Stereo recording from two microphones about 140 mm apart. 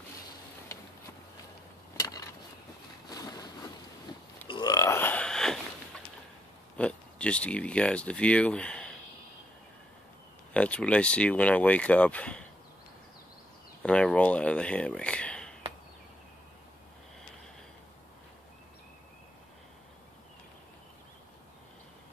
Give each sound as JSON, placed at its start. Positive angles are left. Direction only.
{"t": 2.0, "sound": "a sound", "side_deg": 25}
{"t": 3.1, "sound": "boat", "side_deg": 25}
{"t": 4.5, "sound": "burping", "side_deg": 30}
{"t": 6.8, "sound": "speech", "side_deg": 10}
{"t": 10.5, "sound": "speech", "side_deg": 10}
{"t": 13.8, "sound": "speech", "side_deg": 5}